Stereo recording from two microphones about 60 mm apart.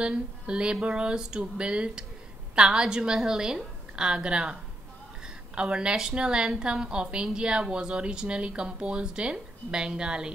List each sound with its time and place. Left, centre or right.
0.0 s a woman's voice: centre